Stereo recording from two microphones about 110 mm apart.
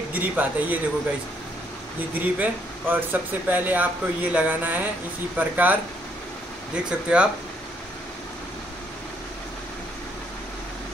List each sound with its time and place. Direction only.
0.1 s speech: 15° right (ahead or behind)
2.1 s speech: 15° right (ahead or behind)